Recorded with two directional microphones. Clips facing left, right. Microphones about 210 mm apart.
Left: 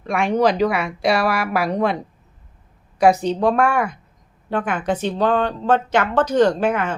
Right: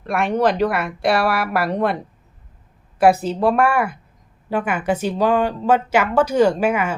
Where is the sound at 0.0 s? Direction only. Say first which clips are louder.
Left 1 dB; centre (ahead or behind).